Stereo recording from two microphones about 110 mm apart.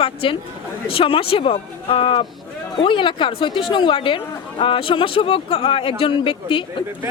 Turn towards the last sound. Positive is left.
turn(degrees=50)  # may be behind; listen again after turning